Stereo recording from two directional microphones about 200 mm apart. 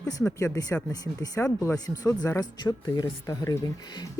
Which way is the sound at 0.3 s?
15° left (ahead or behind).